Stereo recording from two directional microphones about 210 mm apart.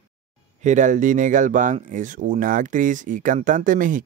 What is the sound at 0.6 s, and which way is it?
Speech, 35° right (ahead or behind).